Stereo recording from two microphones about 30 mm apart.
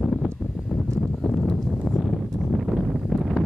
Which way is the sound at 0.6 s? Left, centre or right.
Left.